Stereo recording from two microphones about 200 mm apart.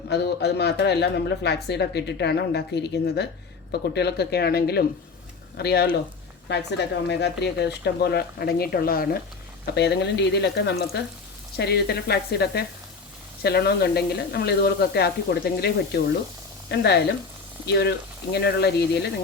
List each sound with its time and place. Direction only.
0.1 s speech: 55° left (ahead or behind)